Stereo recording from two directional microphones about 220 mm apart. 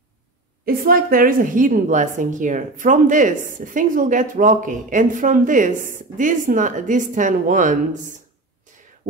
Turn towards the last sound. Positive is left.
turn(degrees=-35)  # may be behind; listen again after turning